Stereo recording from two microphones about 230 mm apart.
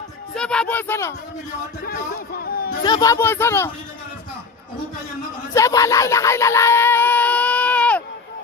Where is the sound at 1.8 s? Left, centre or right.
Left.